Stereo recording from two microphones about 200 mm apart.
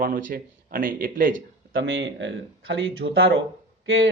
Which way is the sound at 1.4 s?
65° right (ahead or behind).